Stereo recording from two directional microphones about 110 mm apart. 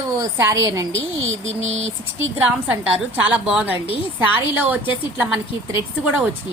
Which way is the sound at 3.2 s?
15° right (ahead or behind).